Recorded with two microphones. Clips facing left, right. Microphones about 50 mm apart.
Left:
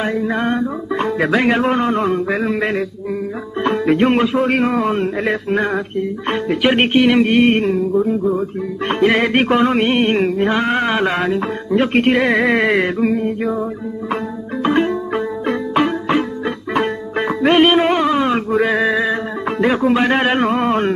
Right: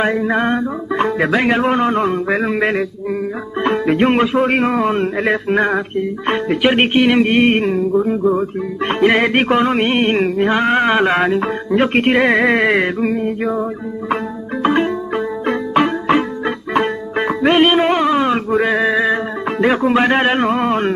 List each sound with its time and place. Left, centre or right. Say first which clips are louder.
0.0 s male singing: right 3 dB; right
0.6 s music: right 2 dB; centre